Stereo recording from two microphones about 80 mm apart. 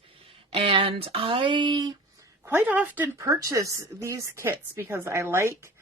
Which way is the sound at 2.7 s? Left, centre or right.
Right.